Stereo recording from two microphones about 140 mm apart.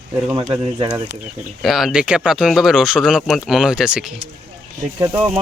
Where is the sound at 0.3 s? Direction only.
35° right (ahead or behind).